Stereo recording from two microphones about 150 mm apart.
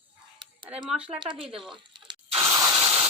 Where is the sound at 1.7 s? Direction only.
30° right (ahead or behind).